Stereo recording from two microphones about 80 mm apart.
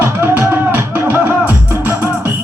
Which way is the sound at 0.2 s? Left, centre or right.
Right.